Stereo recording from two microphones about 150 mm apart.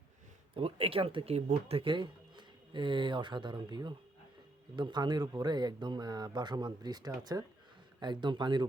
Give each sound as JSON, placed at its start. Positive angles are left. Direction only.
{"t": 0.5, "sound": "speech", "side_deg": -40}